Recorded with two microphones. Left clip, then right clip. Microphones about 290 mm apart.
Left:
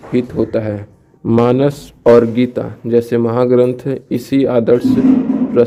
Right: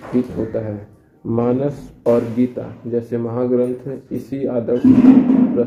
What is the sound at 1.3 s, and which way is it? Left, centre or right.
A man's voice, left.